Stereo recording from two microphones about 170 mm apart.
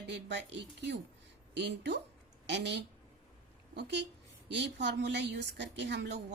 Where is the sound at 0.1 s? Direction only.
90° right.